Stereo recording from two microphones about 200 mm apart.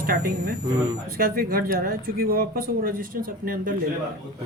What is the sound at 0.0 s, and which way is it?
Speech, 45° right (ahead or behind).